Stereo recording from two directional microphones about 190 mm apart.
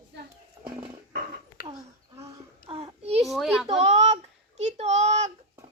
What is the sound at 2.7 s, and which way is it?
Child singing, 30° right (ahead or behind).